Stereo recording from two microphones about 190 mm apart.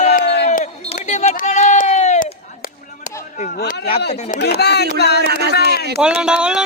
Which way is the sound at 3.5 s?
60° left (ahead or behind).